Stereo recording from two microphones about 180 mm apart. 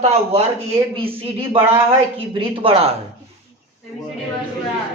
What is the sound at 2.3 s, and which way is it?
Speech, 30° right (ahead or behind).